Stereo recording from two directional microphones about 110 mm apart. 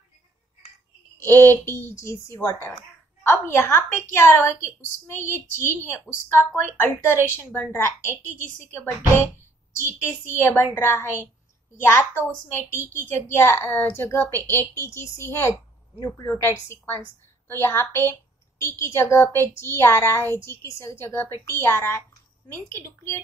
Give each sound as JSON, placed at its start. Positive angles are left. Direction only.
{"t": 1.2, "sound": "a woman's voice", "side_deg": 20}
{"t": 13.1, "sound": "a woman's voice", "side_deg": 20}